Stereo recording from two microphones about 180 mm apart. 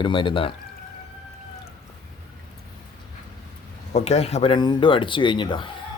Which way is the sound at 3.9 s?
35° left (ahead or behind).